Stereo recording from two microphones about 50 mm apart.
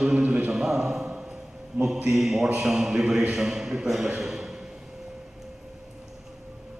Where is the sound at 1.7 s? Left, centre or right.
Right.